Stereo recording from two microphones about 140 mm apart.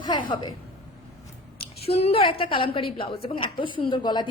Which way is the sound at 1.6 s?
45° left (ahead or behind).